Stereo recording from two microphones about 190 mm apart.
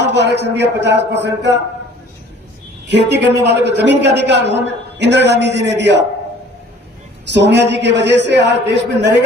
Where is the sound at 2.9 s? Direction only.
65° right (ahead or behind).